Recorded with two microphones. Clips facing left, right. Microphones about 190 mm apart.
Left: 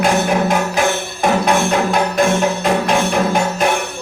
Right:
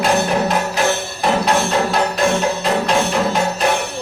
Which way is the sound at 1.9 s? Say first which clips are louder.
Left 2 dB; 50° left (ahead or behind).